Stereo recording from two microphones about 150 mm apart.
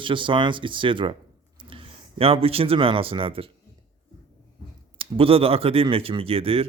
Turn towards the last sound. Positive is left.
turn(degrees=-40)  # may be behind; listen again after turning